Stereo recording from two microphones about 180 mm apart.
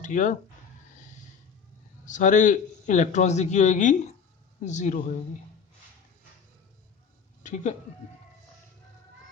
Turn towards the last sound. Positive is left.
turn(degrees=40)  # may be behind; listen again after turning